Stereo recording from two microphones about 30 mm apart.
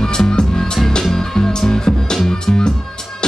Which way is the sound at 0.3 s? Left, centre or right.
Left.